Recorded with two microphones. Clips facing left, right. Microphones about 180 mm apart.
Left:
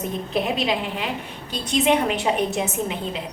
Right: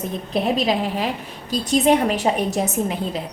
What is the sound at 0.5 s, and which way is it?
A woman's voice, 40° right (ahead or behind).